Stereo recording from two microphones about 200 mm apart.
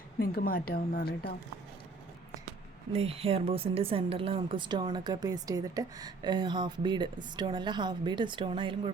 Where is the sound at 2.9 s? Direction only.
30° right (ahead or behind).